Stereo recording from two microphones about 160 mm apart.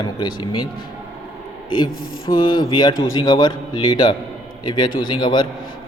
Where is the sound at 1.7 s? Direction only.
25° left (ahead or behind).